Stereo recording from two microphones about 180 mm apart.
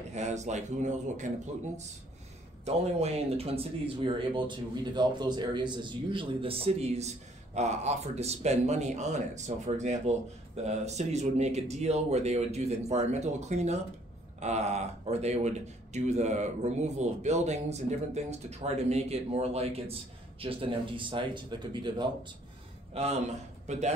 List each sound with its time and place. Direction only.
0.1 s speech: 40° right (ahead or behind)
2.6 s speech: 35° right (ahead or behind)
22.9 s a man's voice: 35° right (ahead or behind)